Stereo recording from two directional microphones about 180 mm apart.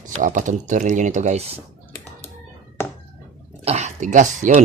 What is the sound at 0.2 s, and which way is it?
Speech, 45° right (ahead or behind).